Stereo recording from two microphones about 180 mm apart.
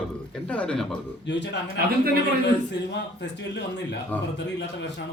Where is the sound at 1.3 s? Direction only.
75° left (ahead or behind).